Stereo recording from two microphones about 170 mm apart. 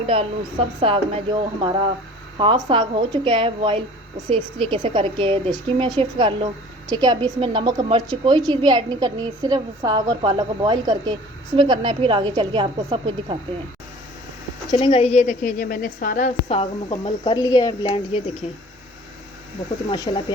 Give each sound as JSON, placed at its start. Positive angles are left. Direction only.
{"t": 0.8, "sound": "a woman's voice", "side_deg": -30}
{"t": 14.7, "sound": "a woman's voice", "side_deg": 30}
{"t": 16.5, "sound": "speech", "side_deg": 35}
{"t": 17.3, "sound": "speech", "side_deg": 20}
{"t": 18.4, "sound": "speech", "side_deg": 40}
{"t": 19.9, "sound": "speech", "side_deg": 25}